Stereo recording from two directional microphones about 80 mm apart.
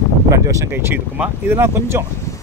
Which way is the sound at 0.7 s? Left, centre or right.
Right.